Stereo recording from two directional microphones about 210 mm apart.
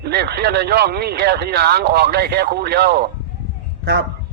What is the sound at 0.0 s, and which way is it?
Speech, 50° right (ahead or behind).